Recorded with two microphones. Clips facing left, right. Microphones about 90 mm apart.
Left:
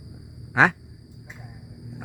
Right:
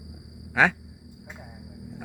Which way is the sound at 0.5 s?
20° left (ahead or behind).